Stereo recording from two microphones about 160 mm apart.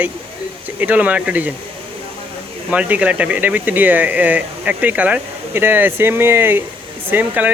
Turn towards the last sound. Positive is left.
turn(degrees=-10)  # may be behind; listen again after turning